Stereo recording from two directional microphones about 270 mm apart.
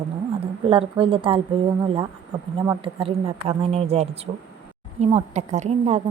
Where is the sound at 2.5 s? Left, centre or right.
Centre.